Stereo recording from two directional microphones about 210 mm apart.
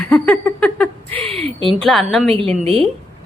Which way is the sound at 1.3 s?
25° right (ahead or behind).